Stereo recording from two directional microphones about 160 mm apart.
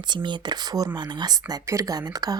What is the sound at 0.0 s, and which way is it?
A woman's voice, 30° right (ahead or behind).